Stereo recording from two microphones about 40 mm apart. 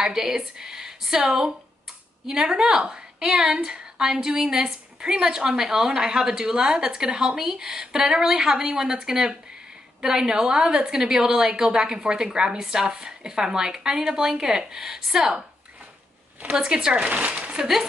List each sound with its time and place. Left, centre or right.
0.0 s a woman's voice: centre
2.2 s a woman's voice: centre
16.5 s a woman's voice: right
17.1 s speech: right